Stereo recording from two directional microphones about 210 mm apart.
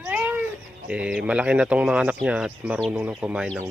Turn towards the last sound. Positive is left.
turn(degrees=-5)  # may be behind; listen again after turning